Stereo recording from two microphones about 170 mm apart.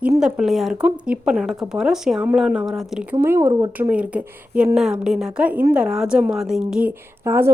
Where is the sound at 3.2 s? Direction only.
15° right (ahead or behind).